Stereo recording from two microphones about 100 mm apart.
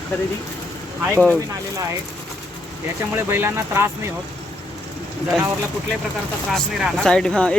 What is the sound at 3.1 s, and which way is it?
Speech, 25° right (ahead or behind).